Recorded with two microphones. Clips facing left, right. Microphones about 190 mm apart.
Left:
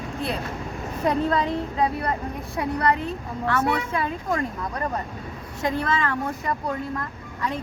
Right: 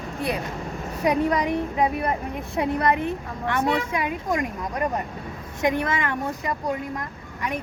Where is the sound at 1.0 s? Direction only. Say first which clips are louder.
Right 1 dB; 15° right (ahead or behind).